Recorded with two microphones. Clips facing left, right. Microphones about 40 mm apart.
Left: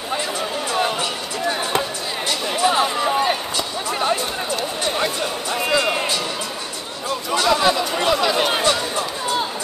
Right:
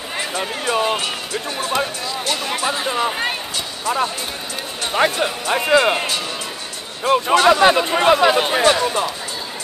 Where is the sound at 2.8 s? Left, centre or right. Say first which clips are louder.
Right 1 dB; centre.